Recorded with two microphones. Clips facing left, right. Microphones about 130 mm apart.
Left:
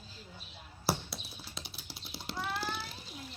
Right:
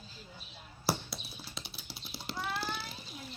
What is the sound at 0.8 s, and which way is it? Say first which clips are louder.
Cat: even; centre (ahead or behind).